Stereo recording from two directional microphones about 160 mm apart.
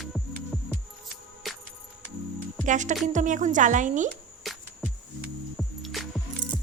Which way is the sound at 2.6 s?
50° right (ahead or behind).